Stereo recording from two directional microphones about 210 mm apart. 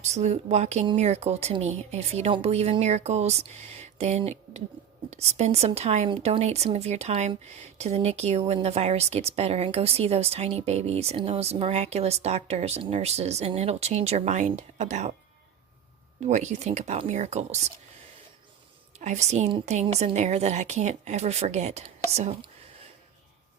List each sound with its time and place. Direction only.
0.0 s speech: 35° right (ahead or behind)
16.2 s speech: 35° right (ahead or behind)
18.9 s speech: 35° right (ahead or behind)